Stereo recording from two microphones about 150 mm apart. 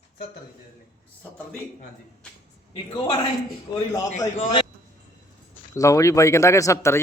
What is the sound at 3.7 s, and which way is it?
Speech, 25° left (ahead or behind).